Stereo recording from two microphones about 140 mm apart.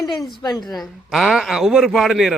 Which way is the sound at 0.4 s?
30° left (ahead or behind).